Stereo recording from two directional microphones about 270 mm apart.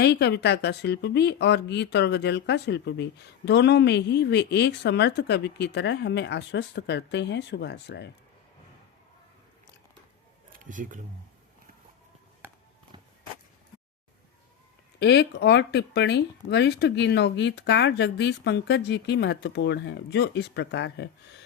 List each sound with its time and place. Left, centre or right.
0.0 s speech: left
10.6 s speech: right
14.9 s speech: left